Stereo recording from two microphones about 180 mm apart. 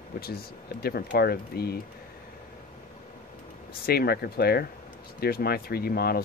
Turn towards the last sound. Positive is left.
turn(degrees=60)  # may be behind; listen again after turning